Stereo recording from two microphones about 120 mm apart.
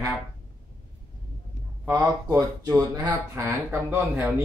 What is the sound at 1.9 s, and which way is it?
Speech, 30° right (ahead or behind).